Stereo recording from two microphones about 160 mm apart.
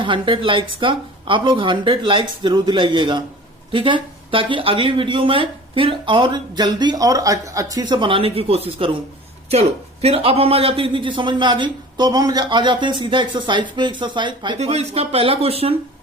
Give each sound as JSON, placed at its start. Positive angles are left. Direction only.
{"t": 0.0, "sound": "a man's voice", "side_deg": -30}
{"t": 14.6, "sound": "speech", "side_deg": -40}